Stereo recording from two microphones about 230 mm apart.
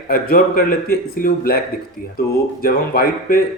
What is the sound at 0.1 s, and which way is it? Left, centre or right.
Speech, left.